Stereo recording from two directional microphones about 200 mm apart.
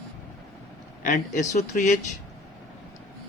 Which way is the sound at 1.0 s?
40° left (ahead or behind).